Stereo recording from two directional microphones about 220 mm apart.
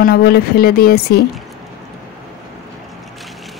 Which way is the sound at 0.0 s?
45° left (ahead or behind).